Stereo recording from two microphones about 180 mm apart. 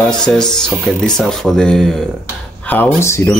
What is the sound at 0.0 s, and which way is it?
Speech, 5° left (ahead or behind).